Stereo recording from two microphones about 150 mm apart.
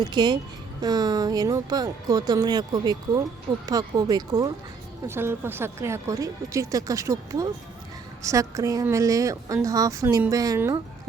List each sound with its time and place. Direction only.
0.0 s a woman's voice: 30° right (ahead or behind)
5.0 s a woman's voice: 15° right (ahead or behind)